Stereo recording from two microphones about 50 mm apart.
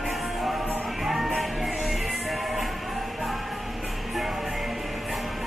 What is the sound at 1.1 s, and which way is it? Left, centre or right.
Music, centre.